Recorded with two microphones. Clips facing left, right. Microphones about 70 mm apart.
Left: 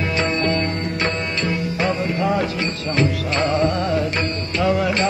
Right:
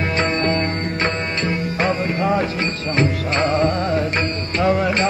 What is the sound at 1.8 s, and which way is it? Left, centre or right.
Music, right.